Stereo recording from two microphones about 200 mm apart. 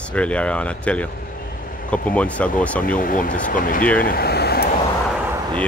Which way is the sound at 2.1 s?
5° left (ahead or behind).